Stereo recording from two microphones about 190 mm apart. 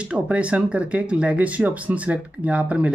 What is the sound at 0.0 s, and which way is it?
Speech, 5° right (ahead or behind).